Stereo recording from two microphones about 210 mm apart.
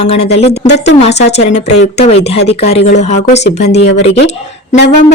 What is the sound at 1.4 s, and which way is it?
Speech, 30° left (ahead or behind).